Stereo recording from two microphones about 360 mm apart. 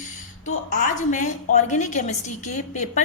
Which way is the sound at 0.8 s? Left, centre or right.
Left.